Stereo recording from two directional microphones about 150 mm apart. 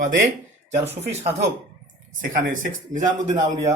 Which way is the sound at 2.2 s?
65° right (ahead or behind).